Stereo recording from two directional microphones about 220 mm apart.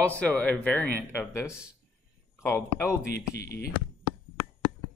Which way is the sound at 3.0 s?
45° left (ahead or behind).